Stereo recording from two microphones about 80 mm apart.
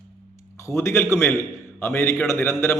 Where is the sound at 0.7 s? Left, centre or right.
Left.